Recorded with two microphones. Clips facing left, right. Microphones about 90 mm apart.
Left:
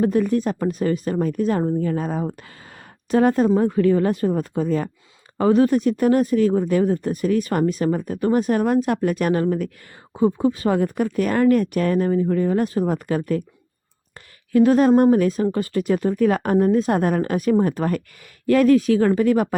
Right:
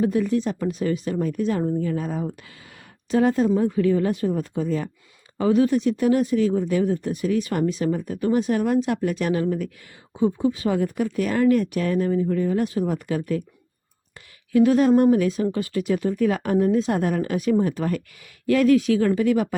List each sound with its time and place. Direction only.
0.0 s speech: 50° left (ahead or behind)
14.5 s speech: 40° left (ahead or behind)